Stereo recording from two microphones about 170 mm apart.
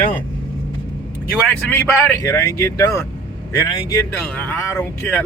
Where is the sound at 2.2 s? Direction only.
15° left (ahead or behind).